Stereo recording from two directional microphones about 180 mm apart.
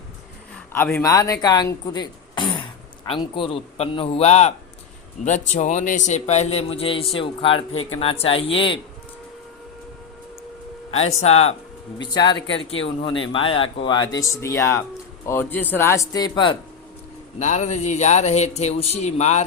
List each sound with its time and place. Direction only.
0.7 s a man's voice: 10° left (ahead or behind); by 8.8 s 30° left (ahead or behind)
11.2 s a man's voice: 35° left (ahead or behind)
12.1 s speech: 25° left (ahead or behind)
12.5 s speech: 90° left
12.8 s speech: 30° left (ahead or behind)
17.4 s a man's voice: 40° left (ahead or behind)